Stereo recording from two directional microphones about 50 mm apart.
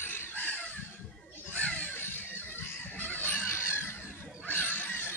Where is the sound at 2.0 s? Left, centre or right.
Left.